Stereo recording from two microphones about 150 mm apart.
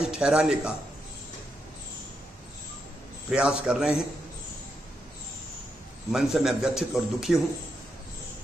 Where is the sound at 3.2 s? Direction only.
5° right (ahead or behind).